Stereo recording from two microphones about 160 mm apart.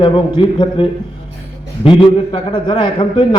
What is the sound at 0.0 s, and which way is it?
A man's voice, 30° left (ahead or behind).